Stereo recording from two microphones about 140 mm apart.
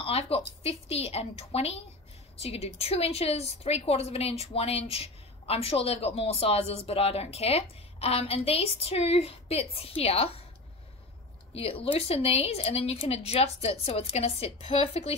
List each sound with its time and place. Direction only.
0.0 s a woman's voice: 45° left (ahead or behind)
11.5 s a woman's voice: 45° left (ahead or behind)